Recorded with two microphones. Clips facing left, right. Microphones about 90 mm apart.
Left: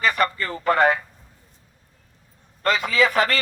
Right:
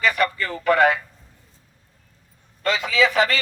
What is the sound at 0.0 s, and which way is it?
Radio, 40° left (ahead or behind).